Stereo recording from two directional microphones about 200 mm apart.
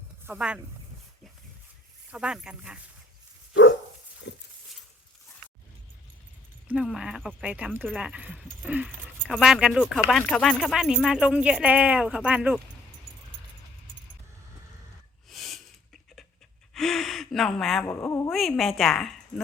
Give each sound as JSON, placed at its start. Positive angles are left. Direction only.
{"t": 0.3, "sound": "speech", "side_deg": -5}
{"t": 2.0, "sound": "speech", "side_deg": -5}
{"t": 3.5, "sound": "dog", "side_deg": 60}
{"t": 4.2, "sound": "a sound", "side_deg": 65}
{"t": 6.7, "sound": "speech", "side_deg": -5}
{"t": 15.3, "sound": "a sound", "side_deg": 0}
{"t": 16.7, "sound": "gasp", "side_deg": 0}
{"t": 17.8, "sound": "speech", "side_deg": 10}
{"t": 18.3, "sound": "speech", "side_deg": 0}